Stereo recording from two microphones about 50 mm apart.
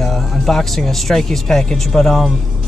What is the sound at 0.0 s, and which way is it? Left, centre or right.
Speech, centre.